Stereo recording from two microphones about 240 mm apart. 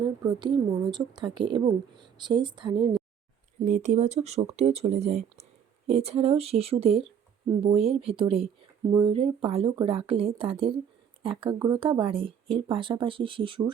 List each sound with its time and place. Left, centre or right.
0.0 s speech: centre
3.7 s speech: right